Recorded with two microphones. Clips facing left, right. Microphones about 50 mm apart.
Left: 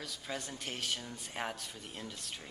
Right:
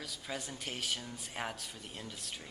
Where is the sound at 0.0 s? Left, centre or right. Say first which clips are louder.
Even; centre.